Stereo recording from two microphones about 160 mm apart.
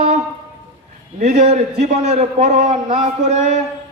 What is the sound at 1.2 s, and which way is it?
A man's voice, 45° right (ahead or behind).